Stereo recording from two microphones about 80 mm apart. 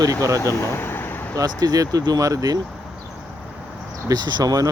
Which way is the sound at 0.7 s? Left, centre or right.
Left.